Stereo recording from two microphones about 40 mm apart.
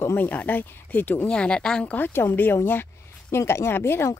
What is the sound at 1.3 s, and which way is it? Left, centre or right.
Speech, left.